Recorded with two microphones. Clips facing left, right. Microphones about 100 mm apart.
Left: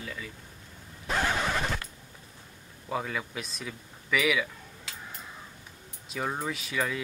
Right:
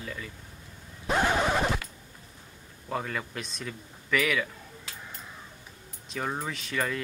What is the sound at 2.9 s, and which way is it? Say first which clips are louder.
Speech: even; 5° left (ahead or behind).